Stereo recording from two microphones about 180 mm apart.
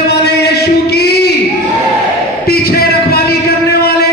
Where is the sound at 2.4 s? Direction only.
55° left (ahead or behind).